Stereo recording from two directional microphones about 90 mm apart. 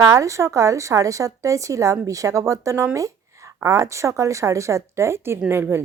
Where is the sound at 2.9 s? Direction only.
35° right (ahead or behind).